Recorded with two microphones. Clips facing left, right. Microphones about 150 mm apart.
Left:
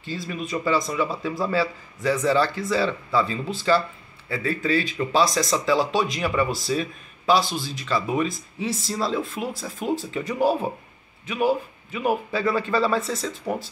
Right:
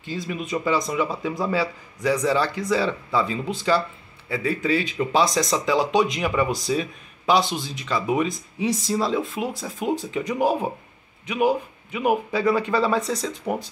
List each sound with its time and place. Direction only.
0.0 s speech: 15° right (ahead or behind)